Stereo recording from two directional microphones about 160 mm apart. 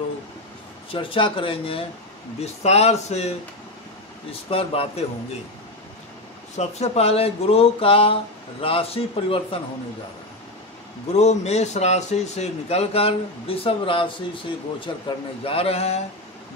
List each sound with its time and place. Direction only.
0.9 s a man's voice: 35° left (ahead or behind)
6.5 s a man's voice: 45° left (ahead or behind)
11.1 s a man's voice: 45° left (ahead or behind)